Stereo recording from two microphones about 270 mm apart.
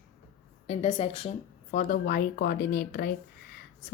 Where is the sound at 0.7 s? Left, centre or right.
Left.